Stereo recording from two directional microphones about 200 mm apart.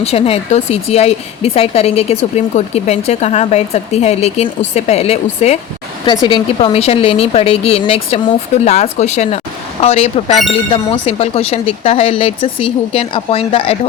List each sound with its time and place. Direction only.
0.0 s a woman's voice: 30° left (ahead or behind)